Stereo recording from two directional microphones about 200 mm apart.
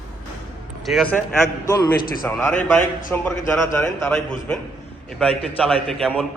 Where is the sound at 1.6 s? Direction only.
15° left (ahead or behind).